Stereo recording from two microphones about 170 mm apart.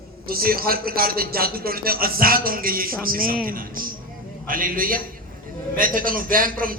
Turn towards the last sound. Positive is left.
turn(degrees=-55)  # may be behind; listen again after turning